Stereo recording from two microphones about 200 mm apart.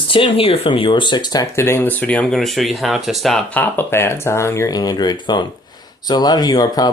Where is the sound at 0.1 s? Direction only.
25° left (ahead or behind).